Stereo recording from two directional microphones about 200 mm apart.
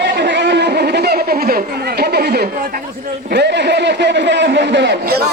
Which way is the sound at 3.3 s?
60° right (ahead or behind).